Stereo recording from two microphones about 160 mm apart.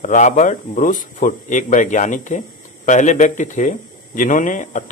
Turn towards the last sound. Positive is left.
turn(degrees=55)  # may be behind; listen again after turning